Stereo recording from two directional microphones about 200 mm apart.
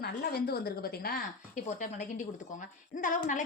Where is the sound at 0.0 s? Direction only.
50° left (ahead or behind).